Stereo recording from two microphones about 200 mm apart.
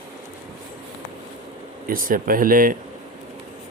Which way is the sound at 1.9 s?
45° right (ahead or behind).